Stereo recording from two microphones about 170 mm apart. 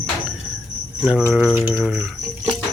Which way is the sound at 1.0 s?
5° right (ahead or behind).